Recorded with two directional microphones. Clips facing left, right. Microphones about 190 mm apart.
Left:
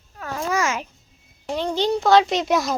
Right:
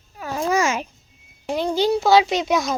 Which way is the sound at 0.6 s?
25° right (ahead or behind).